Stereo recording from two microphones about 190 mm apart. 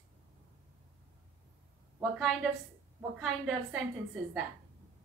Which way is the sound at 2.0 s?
Centre (ahead or behind).